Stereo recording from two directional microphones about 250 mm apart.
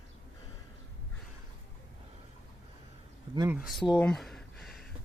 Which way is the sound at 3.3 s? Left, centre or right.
Centre.